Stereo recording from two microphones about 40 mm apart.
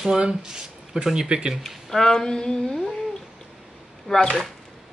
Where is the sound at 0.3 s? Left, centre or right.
Centre.